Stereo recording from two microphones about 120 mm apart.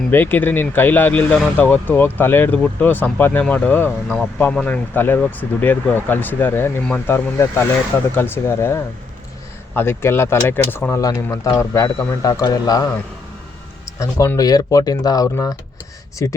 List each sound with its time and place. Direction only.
0.1 s speech: 15° left (ahead or behind)
11.0 s speech: 30° left (ahead or behind)
14.0 s speech: 25° left (ahead or behind)